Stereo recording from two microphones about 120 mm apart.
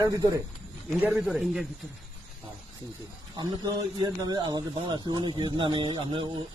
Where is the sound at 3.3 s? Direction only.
35° right (ahead or behind).